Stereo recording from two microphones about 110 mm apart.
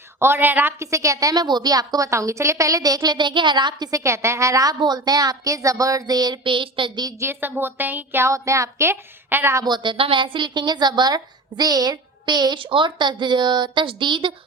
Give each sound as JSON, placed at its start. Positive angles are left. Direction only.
{"t": 0.2, "sound": "a woman's voice", "side_deg": -20}
{"t": 3.9, "sound": "a woman's voice", "side_deg": -25}
{"t": 7.2, "sound": "speech", "side_deg": -20}
{"t": 9.6, "sound": "a woman's voice", "side_deg": -45}